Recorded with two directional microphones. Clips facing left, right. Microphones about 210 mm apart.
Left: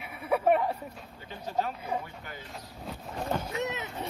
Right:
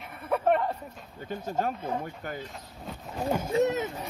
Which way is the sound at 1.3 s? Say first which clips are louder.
Right 2 dB; 45° right (ahead or behind).